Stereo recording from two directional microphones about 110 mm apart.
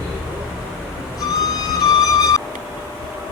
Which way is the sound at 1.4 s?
35° left (ahead or behind).